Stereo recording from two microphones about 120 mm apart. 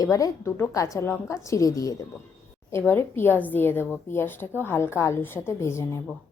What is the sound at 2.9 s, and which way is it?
A woman's voice, 20° left (ahead or behind).